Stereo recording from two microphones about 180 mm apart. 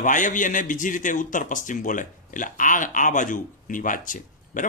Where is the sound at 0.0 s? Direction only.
45° left (ahead or behind).